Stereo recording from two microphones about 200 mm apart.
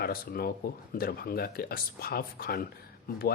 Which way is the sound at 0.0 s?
50° left (ahead or behind).